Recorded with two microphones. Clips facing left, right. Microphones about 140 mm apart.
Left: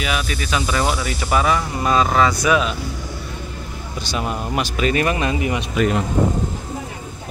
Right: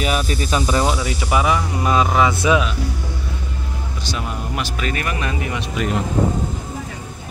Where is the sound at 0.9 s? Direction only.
15° right (ahead or behind).